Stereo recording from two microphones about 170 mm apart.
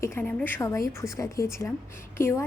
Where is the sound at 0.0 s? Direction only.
15° left (ahead or behind).